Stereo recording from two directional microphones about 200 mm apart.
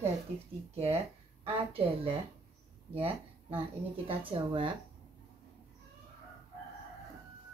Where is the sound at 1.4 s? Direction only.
30° right (ahead or behind).